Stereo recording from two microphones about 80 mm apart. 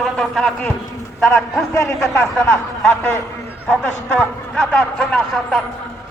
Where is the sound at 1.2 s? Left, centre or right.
Left.